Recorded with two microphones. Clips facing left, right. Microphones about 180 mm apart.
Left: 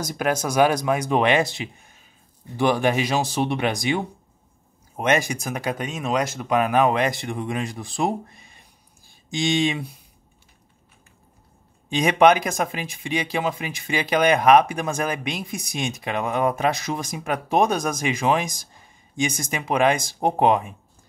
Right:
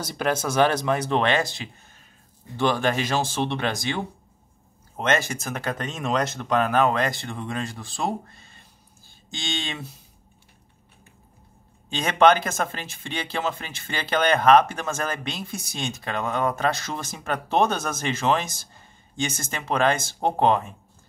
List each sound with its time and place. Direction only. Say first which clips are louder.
0.0 s speech: left 1 dB; 10° left (ahead or behind)
4.9 s speech: left 3 dB; 15° left (ahead or behind)
11.9 s speech: left 2 dB; 15° left (ahead or behind)